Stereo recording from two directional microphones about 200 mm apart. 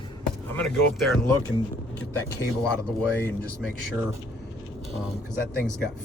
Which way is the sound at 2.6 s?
5° left (ahead or behind).